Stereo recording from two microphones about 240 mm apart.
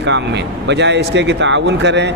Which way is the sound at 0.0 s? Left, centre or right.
Right.